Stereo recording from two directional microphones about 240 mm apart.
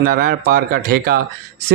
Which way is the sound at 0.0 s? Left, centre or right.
Right.